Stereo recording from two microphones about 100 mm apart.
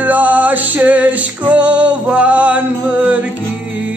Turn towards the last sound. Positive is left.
turn(degrees=-15)  # may be behind; listen again after turning